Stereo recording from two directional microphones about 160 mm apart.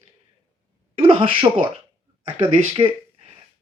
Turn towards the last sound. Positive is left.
turn(degrees=-35)  # may be behind; listen again after turning